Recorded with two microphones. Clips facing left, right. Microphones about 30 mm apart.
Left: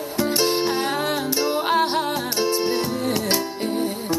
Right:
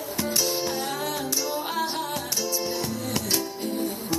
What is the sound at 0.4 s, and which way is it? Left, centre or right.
Music, left.